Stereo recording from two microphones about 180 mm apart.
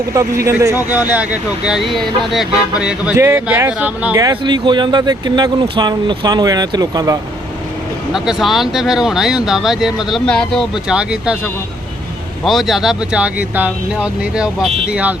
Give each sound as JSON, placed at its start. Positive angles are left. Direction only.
{"t": 0.1, "sound": "speech", "side_deg": -15}
{"t": 4.2, "sound": "speech", "side_deg": -25}
{"t": 8.1, "sound": "speech", "side_deg": -5}
{"t": 12.5, "sound": "speech", "side_deg": 0}